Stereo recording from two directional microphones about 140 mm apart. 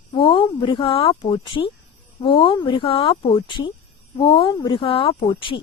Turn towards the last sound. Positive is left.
turn(degrees=40)  # may be behind; listen again after turning